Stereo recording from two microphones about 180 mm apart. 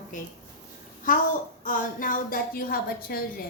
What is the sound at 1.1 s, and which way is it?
A woman's voice, 50° left (ahead or behind).